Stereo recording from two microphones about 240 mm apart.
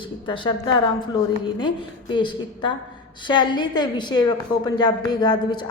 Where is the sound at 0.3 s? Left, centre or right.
Centre.